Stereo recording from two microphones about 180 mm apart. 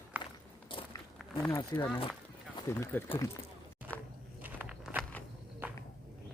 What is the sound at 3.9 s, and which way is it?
Walk, 10° left (ahead or behind).